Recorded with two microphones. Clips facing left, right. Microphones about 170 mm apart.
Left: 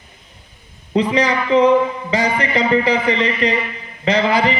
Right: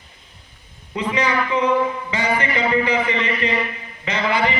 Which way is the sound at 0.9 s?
35° left (ahead or behind).